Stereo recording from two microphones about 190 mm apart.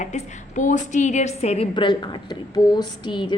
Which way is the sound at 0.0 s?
40° left (ahead or behind).